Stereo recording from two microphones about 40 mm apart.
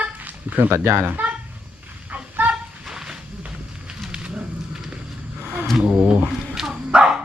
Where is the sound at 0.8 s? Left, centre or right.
Right.